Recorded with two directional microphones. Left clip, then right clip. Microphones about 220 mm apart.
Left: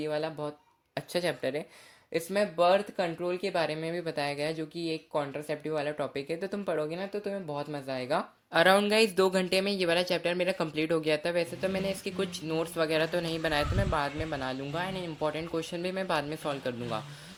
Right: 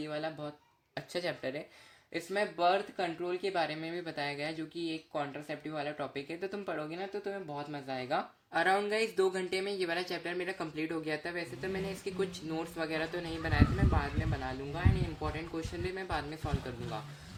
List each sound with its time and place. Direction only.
0.0 s speech: 35° left (ahead or behind)